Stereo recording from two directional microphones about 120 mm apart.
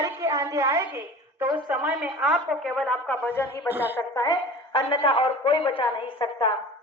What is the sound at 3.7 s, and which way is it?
Speech, 15° right (ahead or behind).